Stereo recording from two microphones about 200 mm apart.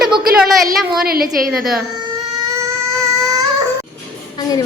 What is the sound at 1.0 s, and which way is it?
Speech, 50° right (ahead or behind).